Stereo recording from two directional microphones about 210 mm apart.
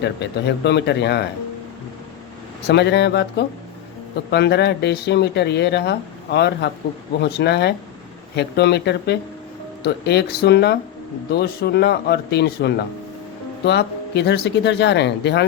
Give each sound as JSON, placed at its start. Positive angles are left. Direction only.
{"t": 0.0, "sound": "speech", "side_deg": 55}
{"t": 2.6, "sound": "speech", "side_deg": 55}